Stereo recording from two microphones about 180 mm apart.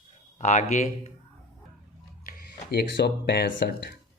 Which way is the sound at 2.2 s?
55° left (ahead or behind).